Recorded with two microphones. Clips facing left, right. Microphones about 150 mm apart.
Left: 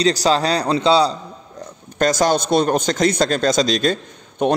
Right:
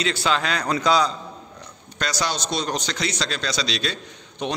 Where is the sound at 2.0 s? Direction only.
45° left (ahead or behind).